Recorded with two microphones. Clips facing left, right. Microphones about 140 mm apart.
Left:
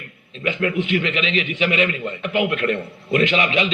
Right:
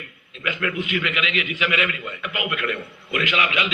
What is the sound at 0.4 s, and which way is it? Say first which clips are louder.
A man's voice: left 5 dB; 30° left (ahead or behind).